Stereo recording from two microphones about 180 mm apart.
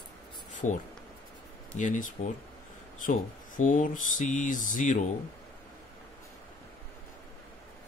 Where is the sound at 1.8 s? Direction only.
45° left (ahead or behind).